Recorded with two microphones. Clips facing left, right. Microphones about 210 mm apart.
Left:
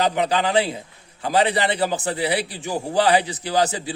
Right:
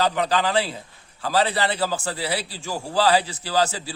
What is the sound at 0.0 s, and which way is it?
A man's voice, 15° left (ahead or behind).